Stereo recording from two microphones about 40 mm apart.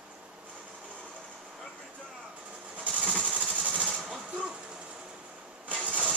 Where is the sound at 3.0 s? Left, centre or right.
Left.